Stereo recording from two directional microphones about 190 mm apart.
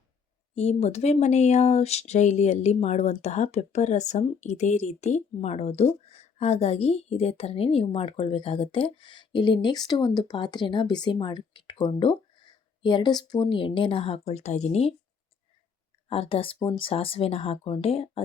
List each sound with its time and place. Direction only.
0.5 s speech: 35° left (ahead or behind)
16.0 s speech: 30° left (ahead or behind)